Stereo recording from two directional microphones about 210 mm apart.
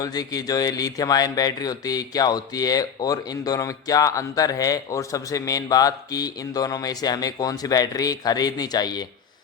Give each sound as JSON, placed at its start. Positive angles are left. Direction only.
{"t": 0.0, "sound": "speech", "side_deg": 20}